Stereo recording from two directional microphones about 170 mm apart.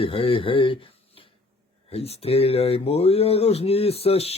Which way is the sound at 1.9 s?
35° left (ahead or behind).